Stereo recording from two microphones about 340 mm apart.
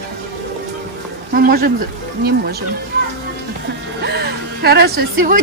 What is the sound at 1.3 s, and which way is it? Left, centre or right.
Speech, right.